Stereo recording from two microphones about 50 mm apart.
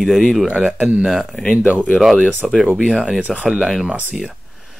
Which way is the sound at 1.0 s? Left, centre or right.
Centre.